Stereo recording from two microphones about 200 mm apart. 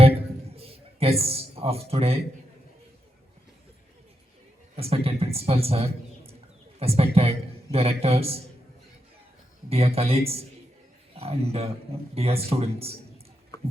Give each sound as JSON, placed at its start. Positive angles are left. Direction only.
{"t": 0.0, "sound": "music", "side_deg": -30}
{"t": 4.8, "sound": "a man's voice", "side_deg": -30}
{"t": 9.6, "sound": "a man's voice", "side_deg": -30}